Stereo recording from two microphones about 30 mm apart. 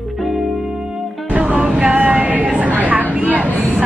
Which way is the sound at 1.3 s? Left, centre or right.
Right.